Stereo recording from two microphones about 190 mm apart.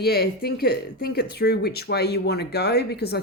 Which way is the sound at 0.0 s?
55° left (ahead or behind).